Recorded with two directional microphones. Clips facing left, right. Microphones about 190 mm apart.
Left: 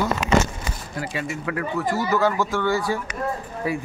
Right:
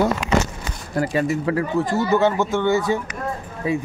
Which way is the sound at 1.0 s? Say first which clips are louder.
Right 9 dB; 40° right (ahead or behind).